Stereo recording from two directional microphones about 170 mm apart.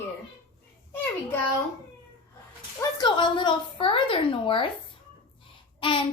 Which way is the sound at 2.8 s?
25° left (ahead or behind).